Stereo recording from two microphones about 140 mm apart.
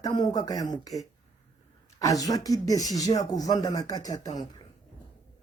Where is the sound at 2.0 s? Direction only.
25° left (ahead or behind).